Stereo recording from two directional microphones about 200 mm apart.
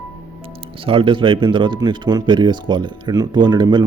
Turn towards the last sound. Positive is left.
turn(degrees=-20)  # may be behind; listen again after turning